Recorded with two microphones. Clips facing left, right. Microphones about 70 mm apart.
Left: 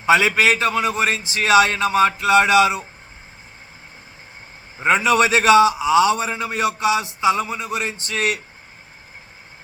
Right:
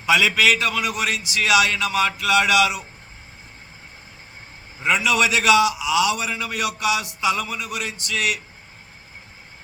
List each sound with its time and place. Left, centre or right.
0.0 s a man's voice: left
4.8 s a man's voice: left